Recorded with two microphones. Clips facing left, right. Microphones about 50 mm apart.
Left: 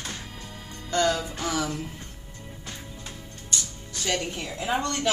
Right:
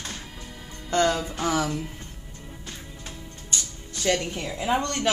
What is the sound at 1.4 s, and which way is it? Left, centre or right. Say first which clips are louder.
Speech: right 3 dB; right.